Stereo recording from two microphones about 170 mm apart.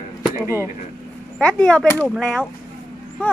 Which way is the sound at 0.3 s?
15° right (ahead or behind).